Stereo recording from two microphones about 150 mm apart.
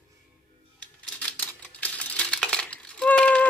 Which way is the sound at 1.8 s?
10° left (ahead or behind).